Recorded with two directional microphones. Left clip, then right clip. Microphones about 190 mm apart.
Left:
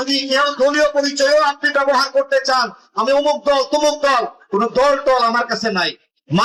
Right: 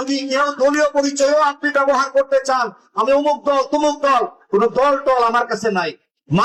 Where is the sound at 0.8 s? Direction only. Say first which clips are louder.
Left 1 dB; 35° left (ahead or behind).